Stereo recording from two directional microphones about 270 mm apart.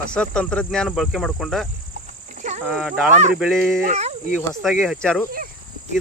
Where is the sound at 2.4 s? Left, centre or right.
Right.